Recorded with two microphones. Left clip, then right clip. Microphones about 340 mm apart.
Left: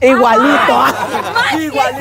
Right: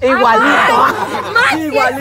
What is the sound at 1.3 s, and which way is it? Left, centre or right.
Speech, centre.